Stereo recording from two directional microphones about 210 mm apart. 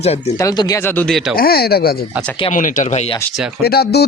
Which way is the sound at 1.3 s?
45° left (ahead or behind).